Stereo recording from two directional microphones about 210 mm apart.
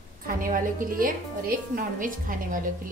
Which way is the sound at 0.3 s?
40° right (ahead or behind).